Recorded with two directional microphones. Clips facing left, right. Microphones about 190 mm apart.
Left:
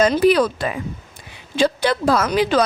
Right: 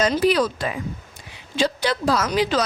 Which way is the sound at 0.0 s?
55° left (ahead or behind).